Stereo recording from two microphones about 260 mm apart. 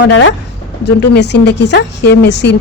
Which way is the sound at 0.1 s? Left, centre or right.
Left.